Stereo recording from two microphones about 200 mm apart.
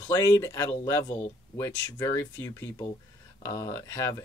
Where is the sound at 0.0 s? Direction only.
15° left (ahead or behind).